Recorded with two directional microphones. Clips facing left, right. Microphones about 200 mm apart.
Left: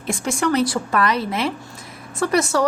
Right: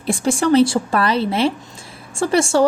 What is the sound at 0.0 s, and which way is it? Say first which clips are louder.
Speech: right 4 dB; 30° right (ahead or behind).